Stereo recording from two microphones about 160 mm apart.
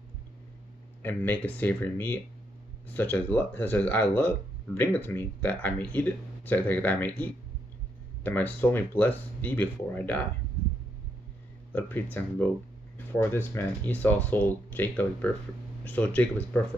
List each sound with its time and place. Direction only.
1.0 s speech: 10° left (ahead or behind)
11.7 s speech: 10° left (ahead or behind)